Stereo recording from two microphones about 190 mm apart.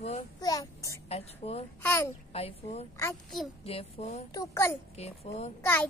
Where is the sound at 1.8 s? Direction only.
15° left (ahead or behind).